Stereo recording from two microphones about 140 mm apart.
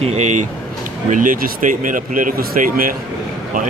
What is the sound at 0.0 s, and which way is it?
Speech, 55° right (ahead or behind).